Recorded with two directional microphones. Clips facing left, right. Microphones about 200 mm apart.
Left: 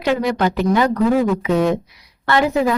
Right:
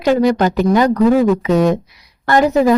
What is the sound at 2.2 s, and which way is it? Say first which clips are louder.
Speech: right 4 dB; 40° right (ahead or behind).